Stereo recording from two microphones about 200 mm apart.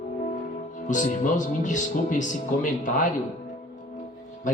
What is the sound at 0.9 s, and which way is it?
Speech, 40° left (ahead or behind).